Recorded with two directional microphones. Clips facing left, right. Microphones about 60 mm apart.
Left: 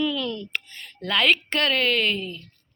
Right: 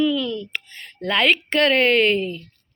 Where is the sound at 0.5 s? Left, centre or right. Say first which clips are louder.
Even; right.